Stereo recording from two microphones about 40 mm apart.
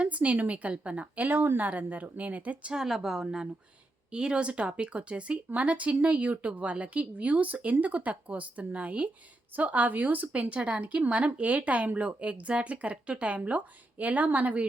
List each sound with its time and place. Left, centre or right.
0.0 s a woman's voice: right
1.3 s a woman's voice: right
2.7 s a woman's voice: centre
4.1 s a woman's voice: right